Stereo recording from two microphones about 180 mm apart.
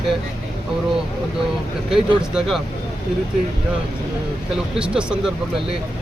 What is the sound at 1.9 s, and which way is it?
Speech, centre (ahead or behind).